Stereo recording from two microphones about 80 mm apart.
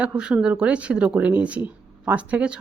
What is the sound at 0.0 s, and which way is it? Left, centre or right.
Speech, centre.